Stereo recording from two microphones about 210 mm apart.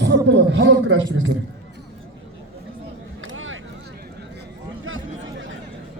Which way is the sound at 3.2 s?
70° right (ahead or behind).